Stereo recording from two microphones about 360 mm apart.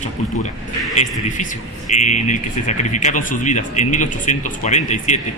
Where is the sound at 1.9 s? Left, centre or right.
Centre.